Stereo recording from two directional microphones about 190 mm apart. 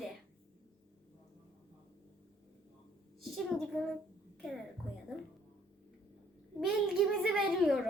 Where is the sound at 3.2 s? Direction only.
Centre (ahead or behind).